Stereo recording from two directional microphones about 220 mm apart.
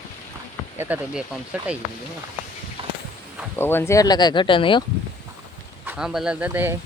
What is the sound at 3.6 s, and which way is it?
Speech, 10° left (ahead or behind).